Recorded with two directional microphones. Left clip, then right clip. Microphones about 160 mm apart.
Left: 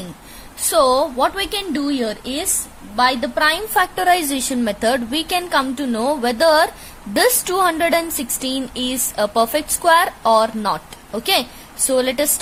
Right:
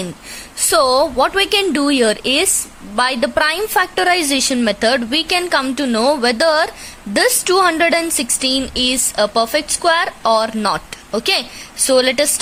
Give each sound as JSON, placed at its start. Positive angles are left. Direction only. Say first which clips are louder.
{"t": 0.7, "sound": "a woman's voice", "louder": "right 2 dB", "side_deg": -20}
{"t": 3.8, "sound": "a woman's voice", "louder": "right 2 dB", "side_deg": -10}